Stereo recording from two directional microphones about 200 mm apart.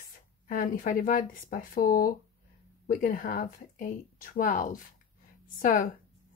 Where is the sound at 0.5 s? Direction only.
45° left (ahead or behind).